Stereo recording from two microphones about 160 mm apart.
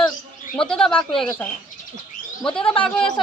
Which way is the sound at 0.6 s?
5° left (ahead or behind).